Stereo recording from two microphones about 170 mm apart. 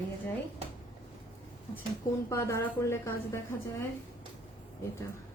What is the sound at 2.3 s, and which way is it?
A woman's voice, 15° left (ahead or behind).